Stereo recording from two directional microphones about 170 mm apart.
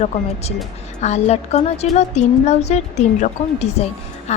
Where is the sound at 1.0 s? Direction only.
40° left (ahead or behind).